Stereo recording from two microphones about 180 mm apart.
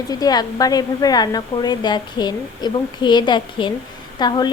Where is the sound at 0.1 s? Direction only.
20° left (ahead or behind).